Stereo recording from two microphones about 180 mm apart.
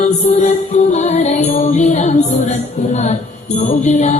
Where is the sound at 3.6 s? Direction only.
40° left (ahead or behind).